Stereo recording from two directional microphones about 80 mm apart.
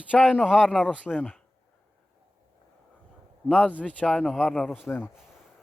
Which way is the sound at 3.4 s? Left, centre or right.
Centre.